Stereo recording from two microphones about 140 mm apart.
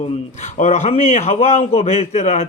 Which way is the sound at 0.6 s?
50° left (ahead or behind).